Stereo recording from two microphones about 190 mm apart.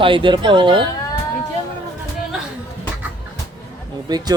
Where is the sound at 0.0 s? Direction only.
25° right (ahead or behind).